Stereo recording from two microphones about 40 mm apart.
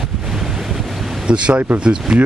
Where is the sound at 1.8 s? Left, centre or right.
Right.